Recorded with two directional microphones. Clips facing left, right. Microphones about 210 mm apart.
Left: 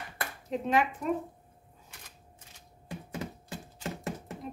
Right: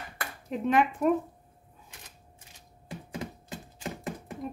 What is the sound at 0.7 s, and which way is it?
Speech, 55° right (ahead or behind).